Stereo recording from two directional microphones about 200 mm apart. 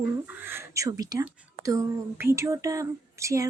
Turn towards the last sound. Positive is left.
turn(degrees=-15)  # may be behind; listen again after turning